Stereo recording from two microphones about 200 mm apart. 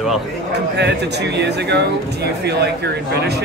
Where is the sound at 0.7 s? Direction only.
60° right (ahead or behind).